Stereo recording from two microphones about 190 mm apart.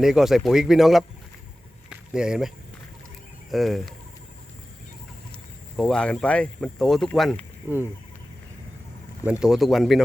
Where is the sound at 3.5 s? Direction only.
Centre (ahead or behind).